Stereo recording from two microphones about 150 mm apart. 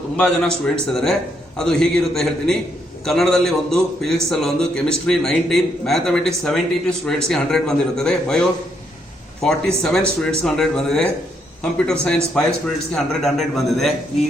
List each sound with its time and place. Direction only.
0.2 s a man's voice: 5° left (ahead or behind)